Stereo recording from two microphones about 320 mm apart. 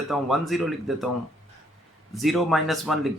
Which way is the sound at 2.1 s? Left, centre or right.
Centre.